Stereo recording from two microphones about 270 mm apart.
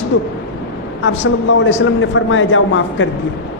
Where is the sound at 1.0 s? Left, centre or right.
Left.